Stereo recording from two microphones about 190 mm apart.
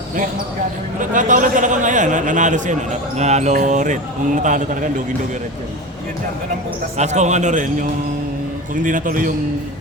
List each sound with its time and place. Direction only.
0.9 s a man's voice: 45° right (ahead or behind)
6.9 s a man's voice: 35° right (ahead or behind)